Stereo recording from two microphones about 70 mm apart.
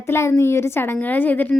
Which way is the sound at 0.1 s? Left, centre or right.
Left.